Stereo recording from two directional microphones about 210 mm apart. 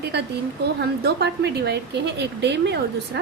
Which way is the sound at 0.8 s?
50° right (ahead or behind).